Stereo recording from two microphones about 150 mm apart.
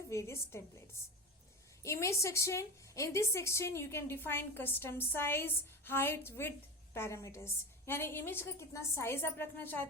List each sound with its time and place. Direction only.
0.1 s a woman's voice: 20° left (ahead or behind)
1.8 s a woman's voice: 20° left (ahead or behind)